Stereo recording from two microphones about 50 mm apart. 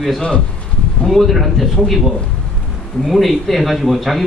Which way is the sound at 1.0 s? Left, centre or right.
Centre.